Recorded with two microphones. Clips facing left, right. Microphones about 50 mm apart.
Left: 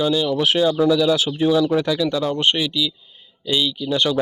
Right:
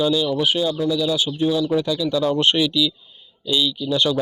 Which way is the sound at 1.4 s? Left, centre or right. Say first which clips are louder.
Left 3 dB; left.